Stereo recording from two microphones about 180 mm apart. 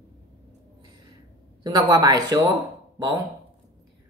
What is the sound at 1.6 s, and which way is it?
Speech, 20° right (ahead or behind).